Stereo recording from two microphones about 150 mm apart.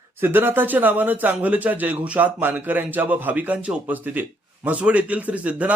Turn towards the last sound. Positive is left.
turn(degrees=-10)  # may be behind; listen again after turning